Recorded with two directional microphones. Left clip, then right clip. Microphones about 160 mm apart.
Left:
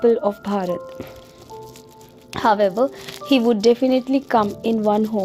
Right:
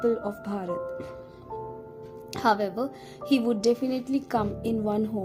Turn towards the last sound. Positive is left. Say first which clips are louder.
# left 9 dB
turn(degrees=25)  # may be behind; listen again after turning